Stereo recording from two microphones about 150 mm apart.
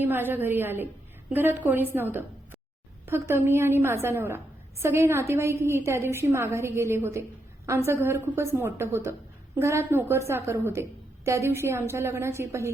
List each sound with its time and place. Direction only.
0.0 s a woman's voice: 15° right (ahead or behind)